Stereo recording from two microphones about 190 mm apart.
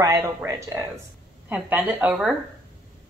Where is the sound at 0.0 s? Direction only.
15° right (ahead or behind).